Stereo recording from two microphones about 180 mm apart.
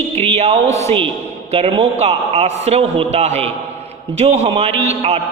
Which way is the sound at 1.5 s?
35° right (ahead or behind).